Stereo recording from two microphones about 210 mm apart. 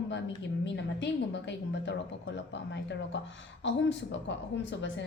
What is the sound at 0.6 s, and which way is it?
A woman's voice, 55° left (ahead or behind).